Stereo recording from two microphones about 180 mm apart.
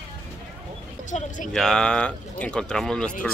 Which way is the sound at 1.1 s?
40° left (ahead or behind).